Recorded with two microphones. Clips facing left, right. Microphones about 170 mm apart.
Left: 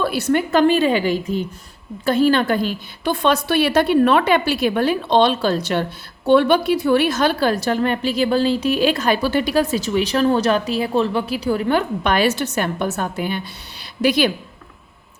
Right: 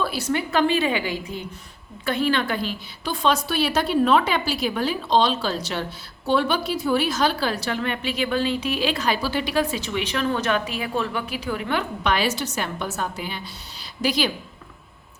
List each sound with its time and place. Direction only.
0.0 s a woman's voice: 60° left (ahead or behind)